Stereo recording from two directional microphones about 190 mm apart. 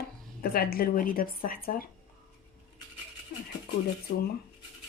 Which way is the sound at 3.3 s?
50° left (ahead or behind).